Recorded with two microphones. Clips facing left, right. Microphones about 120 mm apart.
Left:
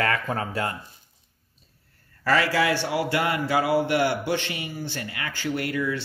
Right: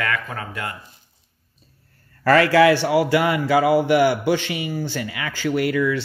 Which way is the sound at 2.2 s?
60° right (ahead or behind).